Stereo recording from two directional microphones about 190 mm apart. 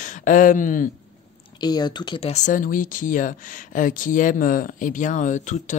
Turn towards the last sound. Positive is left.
turn(degrees=40)  # may be behind; listen again after turning